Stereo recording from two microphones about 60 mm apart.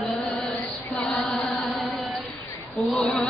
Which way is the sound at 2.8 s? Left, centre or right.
Centre.